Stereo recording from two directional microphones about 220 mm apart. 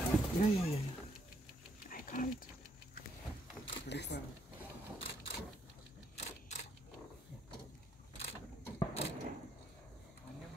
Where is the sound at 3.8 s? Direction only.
50° left (ahead or behind).